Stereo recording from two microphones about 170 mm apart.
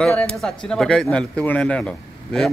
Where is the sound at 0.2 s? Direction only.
5° left (ahead or behind).